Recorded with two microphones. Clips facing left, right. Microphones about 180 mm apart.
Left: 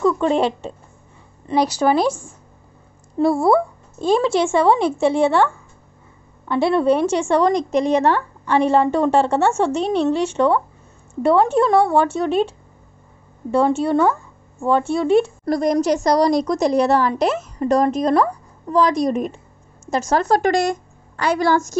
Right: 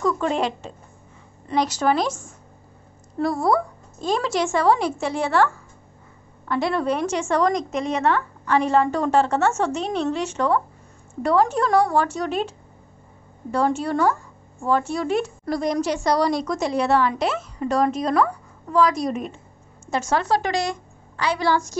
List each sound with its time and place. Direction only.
0.0 s a woman's voice: 30° left (ahead or behind)
3.2 s a woman's voice: 25° left (ahead or behind)
15.5 s a woman's voice: 45° left (ahead or behind)